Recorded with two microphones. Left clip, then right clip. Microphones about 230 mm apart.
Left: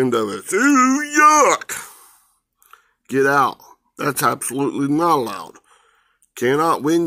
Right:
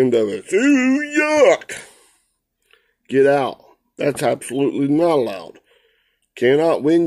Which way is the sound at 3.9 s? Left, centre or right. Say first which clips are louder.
Even; left.